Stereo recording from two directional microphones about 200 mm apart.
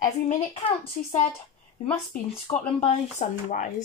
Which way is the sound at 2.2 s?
30° left (ahead or behind).